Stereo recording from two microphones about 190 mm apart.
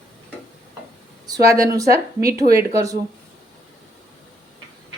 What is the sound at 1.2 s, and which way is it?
Speech, 15° right (ahead or behind).